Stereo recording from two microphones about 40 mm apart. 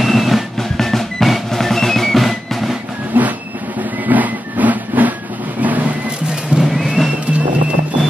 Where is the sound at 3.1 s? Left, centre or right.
Right.